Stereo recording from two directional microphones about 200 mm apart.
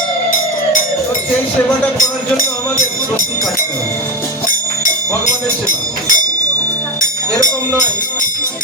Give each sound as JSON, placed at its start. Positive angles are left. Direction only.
{"t": 2.0, "sound": "speech", "side_deg": 40}
{"t": 5.2, "sound": "speech", "side_deg": 40}